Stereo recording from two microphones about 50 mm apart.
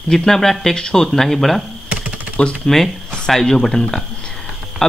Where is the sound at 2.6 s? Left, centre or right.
Centre.